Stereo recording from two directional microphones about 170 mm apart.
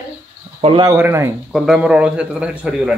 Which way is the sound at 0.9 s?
15° right (ahead or behind).